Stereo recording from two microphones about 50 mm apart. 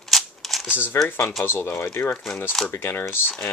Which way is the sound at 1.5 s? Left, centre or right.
Left.